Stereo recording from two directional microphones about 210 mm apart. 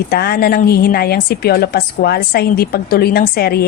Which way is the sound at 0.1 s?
50° left (ahead or behind).